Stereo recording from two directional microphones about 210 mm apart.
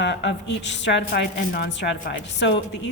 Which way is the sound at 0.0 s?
55° left (ahead or behind).